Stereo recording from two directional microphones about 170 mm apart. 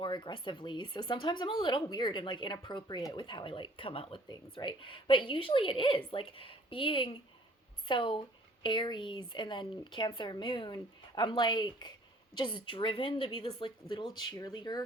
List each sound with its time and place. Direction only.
0.0 s speech: 25° left (ahead or behind)